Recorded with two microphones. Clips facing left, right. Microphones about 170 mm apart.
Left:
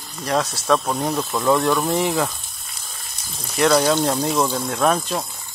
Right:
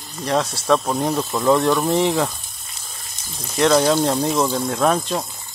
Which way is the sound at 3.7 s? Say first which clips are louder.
Right 1 dB; 10° right (ahead or behind).